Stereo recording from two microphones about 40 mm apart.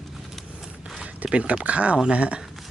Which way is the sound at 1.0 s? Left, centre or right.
Right.